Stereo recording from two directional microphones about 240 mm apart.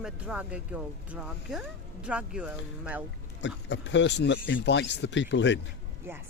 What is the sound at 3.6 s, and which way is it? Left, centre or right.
Speech, left.